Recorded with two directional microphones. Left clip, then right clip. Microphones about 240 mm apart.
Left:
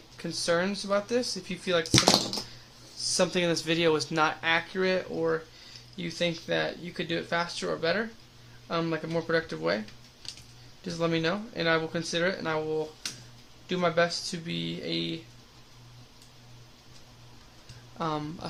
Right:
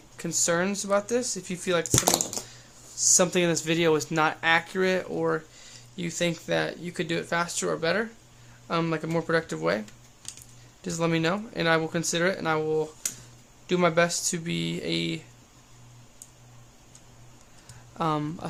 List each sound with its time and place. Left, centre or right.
0.2 s speech: centre
3.2 s speech: centre
10.8 s speech: right
17.9 s speech: right